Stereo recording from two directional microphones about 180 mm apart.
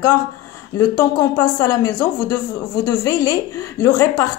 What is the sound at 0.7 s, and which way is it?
A woman's voice, 20° left (ahead or behind).